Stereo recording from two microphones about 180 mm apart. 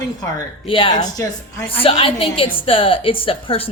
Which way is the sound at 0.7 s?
30° left (ahead or behind).